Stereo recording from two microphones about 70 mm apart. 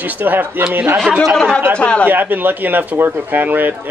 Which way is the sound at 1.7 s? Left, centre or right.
Centre.